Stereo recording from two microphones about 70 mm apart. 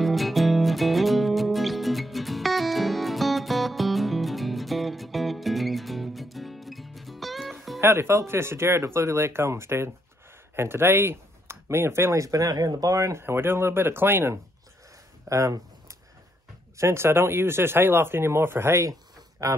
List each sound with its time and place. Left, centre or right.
0.0 s music: centre
7.8 s speech: right
12.3 s speech: right
13.2 s speech: right
15.2 s a sound: right
16.7 s speech: right
19.4 s speech: right